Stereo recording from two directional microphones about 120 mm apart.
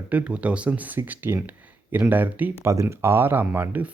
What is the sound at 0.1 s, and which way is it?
Speech, 10° right (ahead or behind).